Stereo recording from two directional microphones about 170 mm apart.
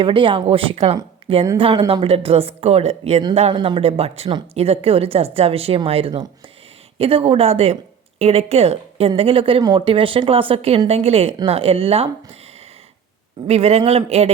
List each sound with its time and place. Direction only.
0.0 s speech: 30° right (ahead or behind)
13.5 s speech: 35° right (ahead or behind)